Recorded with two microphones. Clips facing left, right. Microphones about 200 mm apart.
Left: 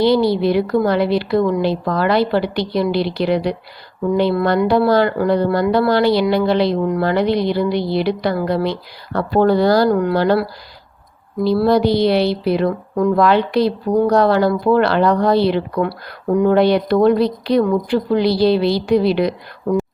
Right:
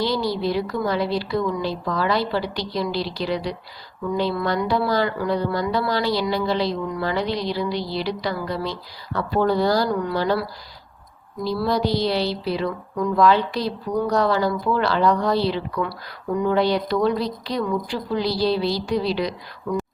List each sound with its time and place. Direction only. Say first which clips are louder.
0.0 s a woman's voice: left 9 dB; 60° left (ahead or behind)
11.4 s a woman's voice: left 8 dB; 60° left (ahead or behind)